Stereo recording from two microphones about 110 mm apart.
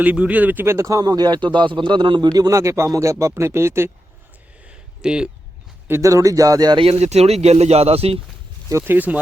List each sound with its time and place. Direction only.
0.0 s speech: 15° right (ahead or behind); by 2.3 s 45° right (ahead or behind)
2.3 s speech: 30° right (ahead or behind)
4.6 s a sound: 10° right (ahead or behind)
5.9 s speech: 30° right (ahead or behind)
6.7 s speech: 70° right (ahead or behind)
8.8 s speech: 15° right (ahead or behind)